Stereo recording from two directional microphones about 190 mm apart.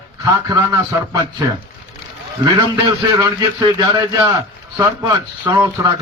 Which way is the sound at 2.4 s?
20° right (ahead or behind).